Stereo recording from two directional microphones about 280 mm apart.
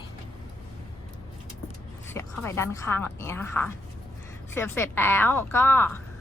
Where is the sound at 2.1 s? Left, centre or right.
Centre.